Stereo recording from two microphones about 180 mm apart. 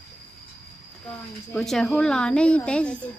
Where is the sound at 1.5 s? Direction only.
5° left (ahead or behind).